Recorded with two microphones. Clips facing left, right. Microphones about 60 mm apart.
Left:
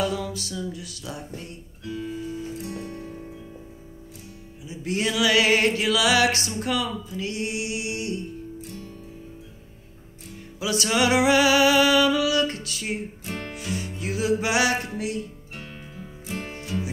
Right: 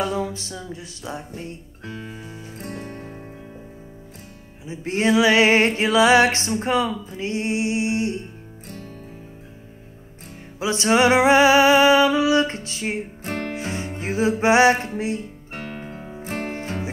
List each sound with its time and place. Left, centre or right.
0.0 s music: right
4.6 s music: right
10.6 s music: right
13.2 s music: right
15.5 s music: right